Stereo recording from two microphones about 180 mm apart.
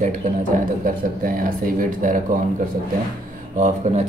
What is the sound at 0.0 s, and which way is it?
Speech, 45° right (ahead or behind).